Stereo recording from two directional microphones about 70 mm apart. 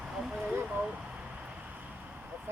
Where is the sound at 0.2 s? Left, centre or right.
Centre.